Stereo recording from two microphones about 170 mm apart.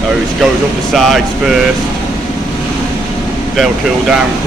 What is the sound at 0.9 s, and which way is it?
Speech, centre (ahead or behind).